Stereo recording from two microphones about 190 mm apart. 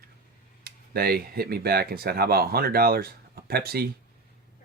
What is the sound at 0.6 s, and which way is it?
Speech, 55° right (ahead or behind).